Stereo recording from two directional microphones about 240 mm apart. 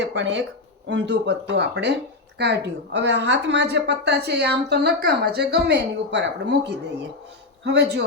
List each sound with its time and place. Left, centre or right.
0.0 s a woman's voice: right